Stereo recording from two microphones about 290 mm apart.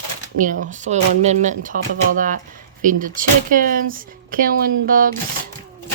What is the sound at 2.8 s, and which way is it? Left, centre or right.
Speech, right.